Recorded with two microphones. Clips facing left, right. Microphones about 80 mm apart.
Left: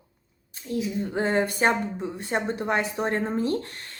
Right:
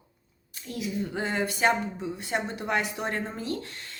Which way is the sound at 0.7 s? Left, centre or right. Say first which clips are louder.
Left 7 dB; left.